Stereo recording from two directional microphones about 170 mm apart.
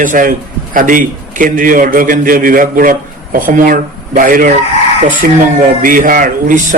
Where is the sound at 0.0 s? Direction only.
50° right (ahead or behind).